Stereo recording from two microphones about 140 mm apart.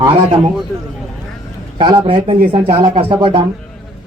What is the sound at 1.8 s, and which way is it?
Speech, 35° right (ahead or behind).